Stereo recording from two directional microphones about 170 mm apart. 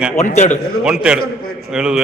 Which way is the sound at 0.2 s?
45° left (ahead or behind).